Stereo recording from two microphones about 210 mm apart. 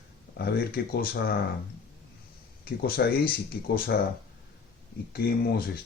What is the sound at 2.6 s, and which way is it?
Speech, 45° left (ahead or behind).